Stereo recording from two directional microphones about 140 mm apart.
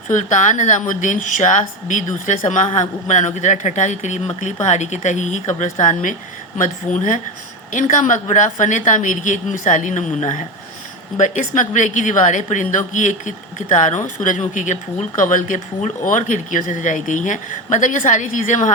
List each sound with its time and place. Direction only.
0.1 s a woman's voice: 65° left (ahead or behind)